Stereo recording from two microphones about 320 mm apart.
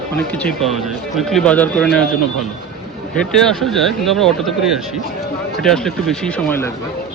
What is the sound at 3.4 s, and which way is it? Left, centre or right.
Speech, centre.